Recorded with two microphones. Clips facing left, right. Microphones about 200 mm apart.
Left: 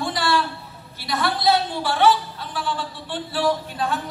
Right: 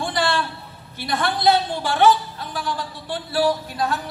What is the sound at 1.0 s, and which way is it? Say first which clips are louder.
A man's voice: right 2 dB; 50° right (ahead or behind).